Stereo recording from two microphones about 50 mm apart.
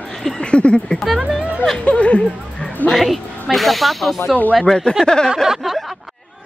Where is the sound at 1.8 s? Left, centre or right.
Left.